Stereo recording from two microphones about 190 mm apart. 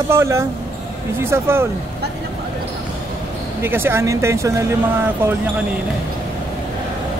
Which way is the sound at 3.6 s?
10° right (ahead or behind).